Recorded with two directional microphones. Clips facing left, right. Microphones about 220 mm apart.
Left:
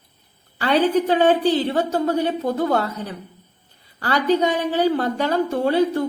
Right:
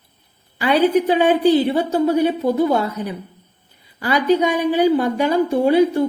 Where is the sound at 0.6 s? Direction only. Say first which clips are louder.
Right 2 dB; 10° right (ahead or behind).